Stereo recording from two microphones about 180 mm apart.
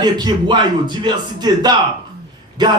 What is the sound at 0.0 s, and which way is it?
A man's voice, 25° right (ahead or behind).